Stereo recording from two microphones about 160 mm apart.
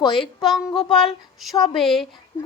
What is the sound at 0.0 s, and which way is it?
Speech, 30° left (ahead or behind).